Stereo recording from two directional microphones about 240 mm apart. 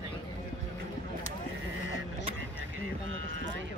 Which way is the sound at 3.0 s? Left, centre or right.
Right.